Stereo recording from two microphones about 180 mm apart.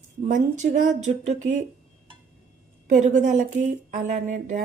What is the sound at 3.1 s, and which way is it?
Speech, 45° right (ahead or behind).